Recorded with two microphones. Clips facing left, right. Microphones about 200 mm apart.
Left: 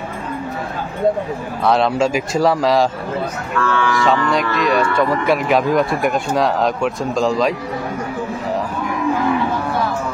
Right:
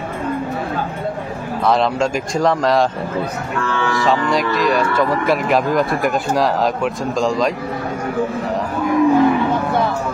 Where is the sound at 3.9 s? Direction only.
Centre (ahead or behind).